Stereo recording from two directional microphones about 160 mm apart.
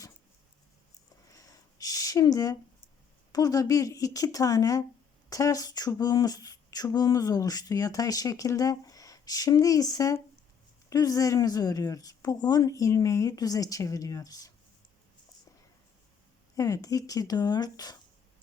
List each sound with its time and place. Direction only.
1.4 s a sound: 20° left (ahead or behind)
3.3 s speech: 20° left (ahead or behind)
16.6 s speech: 20° left (ahead or behind)